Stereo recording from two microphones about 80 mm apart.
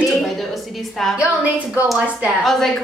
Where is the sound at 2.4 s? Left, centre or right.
Centre.